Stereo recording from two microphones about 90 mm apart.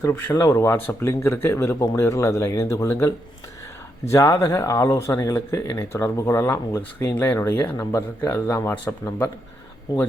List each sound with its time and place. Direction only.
0.3 s speech: 35° left (ahead or behind)